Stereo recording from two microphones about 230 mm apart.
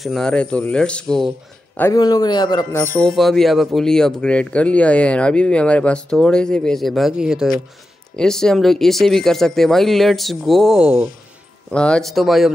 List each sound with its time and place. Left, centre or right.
0.0 s speech: centre
1.8 s speech: centre